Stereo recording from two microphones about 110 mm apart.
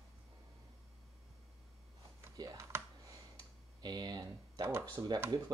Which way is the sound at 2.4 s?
35° right (ahead or behind).